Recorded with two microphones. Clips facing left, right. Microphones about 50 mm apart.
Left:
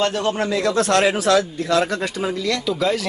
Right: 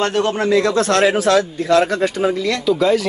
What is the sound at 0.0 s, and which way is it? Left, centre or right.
A man's voice, right.